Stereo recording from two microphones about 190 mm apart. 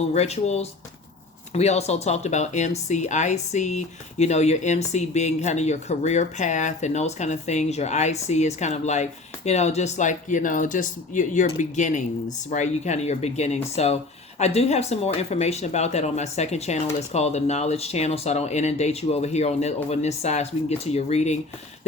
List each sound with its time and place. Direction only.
0.1 s speech: 35° left (ahead or behind)